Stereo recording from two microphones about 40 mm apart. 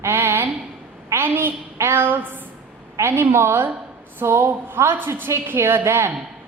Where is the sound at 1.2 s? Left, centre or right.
Right.